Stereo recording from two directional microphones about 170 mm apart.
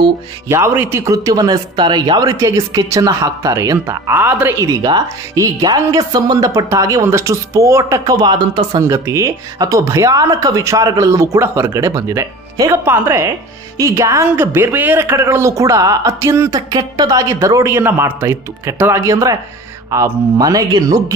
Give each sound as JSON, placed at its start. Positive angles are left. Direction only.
{"t": 0.5, "sound": "a woman's voice", "side_deg": -15}